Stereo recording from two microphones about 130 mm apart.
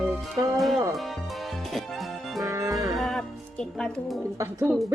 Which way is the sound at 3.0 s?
5° left (ahead or behind).